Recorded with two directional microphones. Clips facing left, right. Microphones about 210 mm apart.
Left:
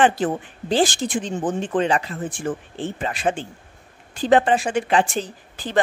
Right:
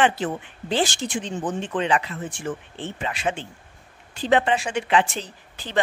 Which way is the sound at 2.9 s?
45° left (ahead or behind).